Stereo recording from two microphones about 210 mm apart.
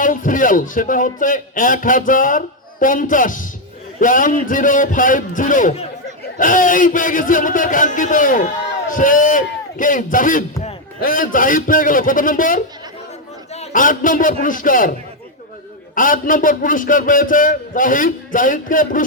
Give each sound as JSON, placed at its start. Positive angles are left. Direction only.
{"t": 0.0, "sound": "a man's voice", "side_deg": 40}
{"t": 16.0, "sound": "a man's voice", "side_deg": 40}